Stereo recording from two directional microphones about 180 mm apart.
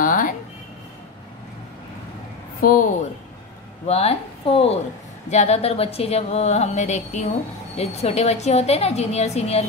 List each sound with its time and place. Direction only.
0.0 s a sound: 50° left (ahead or behind)
2.6 s a woman's voice: 45° left (ahead or behind)
3.8 s a woman's voice: 35° left (ahead or behind)